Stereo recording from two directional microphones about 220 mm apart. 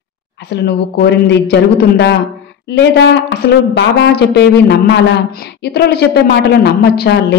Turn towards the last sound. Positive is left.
turn(degrees=50)  # may be behind; listen again after turning